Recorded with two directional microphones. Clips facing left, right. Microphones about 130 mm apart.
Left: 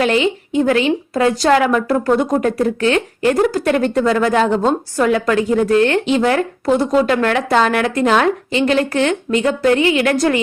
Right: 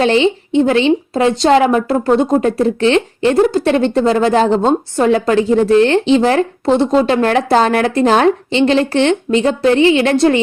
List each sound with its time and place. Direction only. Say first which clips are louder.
0.0 s a woman's voice: right 3 dB; 30° right (ahead or behind)